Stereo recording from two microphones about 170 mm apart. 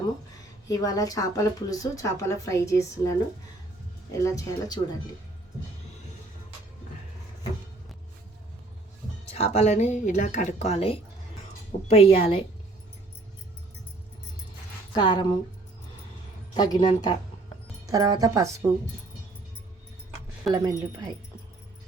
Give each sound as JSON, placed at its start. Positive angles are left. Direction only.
{"t": 0.7, "sound": "speech", "side_deg": 20}
{"t": 9.3, "sound": "a woman's voice", "side_deg": 40}
{"t": 14.9, "sound": "speech", "side_deg": 25}
{"t": 16.6, "sound": "speech", "side_deg": 25}
{"t": 17.8, "sound": "speech", "side_deg": -20}
{"t": 20.5, "sound": "speech", "side_deg": -20}